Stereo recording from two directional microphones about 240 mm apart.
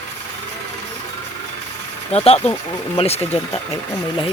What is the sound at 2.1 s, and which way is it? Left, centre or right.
Speech, left.